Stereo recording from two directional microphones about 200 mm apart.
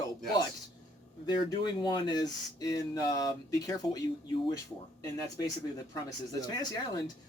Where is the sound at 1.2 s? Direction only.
20° left (ahead or behind).